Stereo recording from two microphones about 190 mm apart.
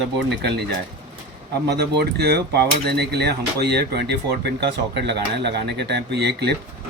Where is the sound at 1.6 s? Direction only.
60° right (ahead or behind).